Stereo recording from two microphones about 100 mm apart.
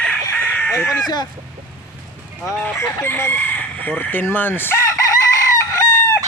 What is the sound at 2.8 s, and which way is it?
Chicken, 25° left (ahead or behind).